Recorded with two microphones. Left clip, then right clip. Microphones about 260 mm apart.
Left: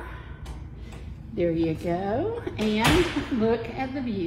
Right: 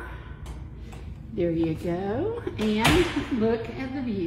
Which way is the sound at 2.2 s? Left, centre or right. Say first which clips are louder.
Even; centre.